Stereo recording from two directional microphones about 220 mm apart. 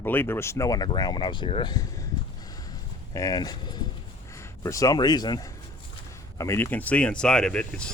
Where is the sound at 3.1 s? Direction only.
15° left (ahead or behind).